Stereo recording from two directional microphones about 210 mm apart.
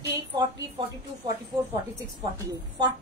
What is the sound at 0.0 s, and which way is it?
Speech, 15° right (ahead or behind).